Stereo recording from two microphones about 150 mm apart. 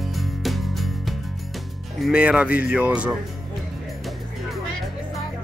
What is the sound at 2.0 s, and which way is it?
Speech, 5° right (ahead or behind).